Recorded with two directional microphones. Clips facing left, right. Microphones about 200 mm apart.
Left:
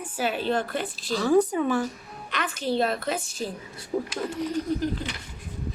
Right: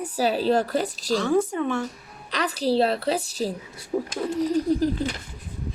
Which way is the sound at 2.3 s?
35° right (ahead or behind).